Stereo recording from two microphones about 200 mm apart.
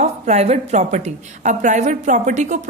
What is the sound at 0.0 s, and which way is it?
A woman's voice, 35° right (ahead or behind).